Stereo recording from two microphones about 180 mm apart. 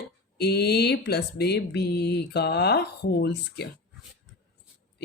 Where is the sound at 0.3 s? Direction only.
65° left (ahead or behind).